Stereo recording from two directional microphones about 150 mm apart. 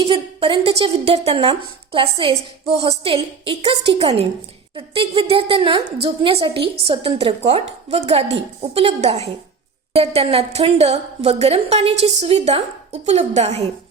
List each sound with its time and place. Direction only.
0.0 s a woman's voice: 35° right (ahead or behind)